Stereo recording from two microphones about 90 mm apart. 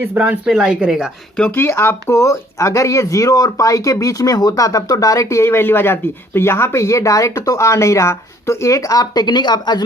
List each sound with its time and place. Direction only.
0.0 s speech: 15° right (ahead or behind)
1.5 s speech: 25° left (ahead or behind); by 9.8 s 55° left (ahead or behind)